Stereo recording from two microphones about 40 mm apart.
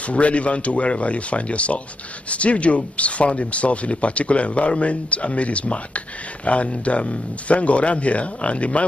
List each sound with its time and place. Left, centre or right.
0.0 s speech: left